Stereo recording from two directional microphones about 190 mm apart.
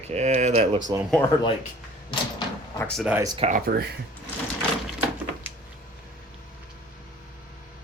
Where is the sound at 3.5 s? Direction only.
55° right (ahead or behind).